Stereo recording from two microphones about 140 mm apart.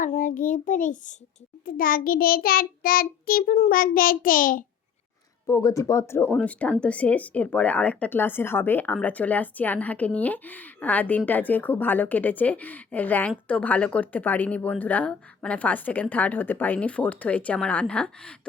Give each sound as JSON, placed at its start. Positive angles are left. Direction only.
{"t": 0.0, "sound": "a child's voice", "side_deg": 75}
{"t": 1.6, "sound": "child singing", "side_deg": 90}
{"t": 5.5, "sound": "a woman's voice", "side_deg": 25}